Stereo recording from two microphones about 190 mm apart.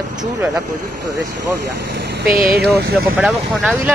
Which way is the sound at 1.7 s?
60° right (ahead or behind).